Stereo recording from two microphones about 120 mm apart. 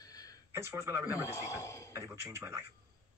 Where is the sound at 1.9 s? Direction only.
20° right (ahead or behind).